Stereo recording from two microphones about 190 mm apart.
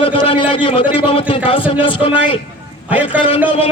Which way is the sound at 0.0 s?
30° left (ahead or behind).